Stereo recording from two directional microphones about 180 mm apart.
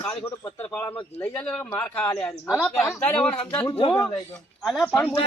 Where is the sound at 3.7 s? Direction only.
25° left (ahead or behind).